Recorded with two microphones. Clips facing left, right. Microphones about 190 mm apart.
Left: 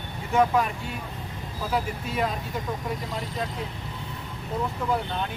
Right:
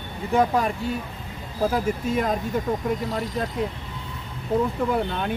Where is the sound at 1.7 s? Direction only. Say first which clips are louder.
Right 2 dB; 45° right (ahead or behind).